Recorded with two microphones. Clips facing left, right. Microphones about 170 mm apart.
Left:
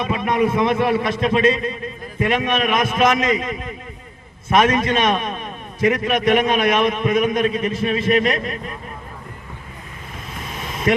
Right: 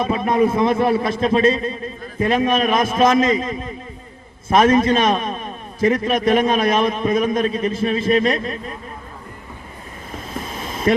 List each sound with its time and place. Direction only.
0.1 s a man's voice: 30° right (ahead or behind)
10.6 s boat: 30° right (ahead or behind)